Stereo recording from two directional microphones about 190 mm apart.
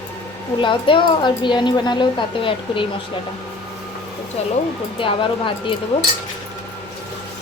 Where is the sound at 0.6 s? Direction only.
25° left (ahead or behind).